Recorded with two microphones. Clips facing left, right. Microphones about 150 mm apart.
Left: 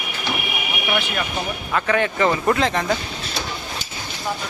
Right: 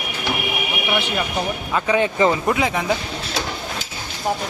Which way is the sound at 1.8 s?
15° right (ahead or behind).